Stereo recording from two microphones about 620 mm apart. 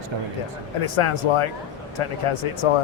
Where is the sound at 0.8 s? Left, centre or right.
Left.